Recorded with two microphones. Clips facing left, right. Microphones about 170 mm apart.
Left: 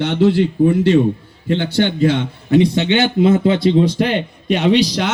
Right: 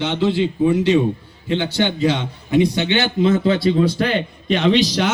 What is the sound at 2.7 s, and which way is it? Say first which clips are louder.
A man's voice: left 4 dB; 25° left (ahead or behind).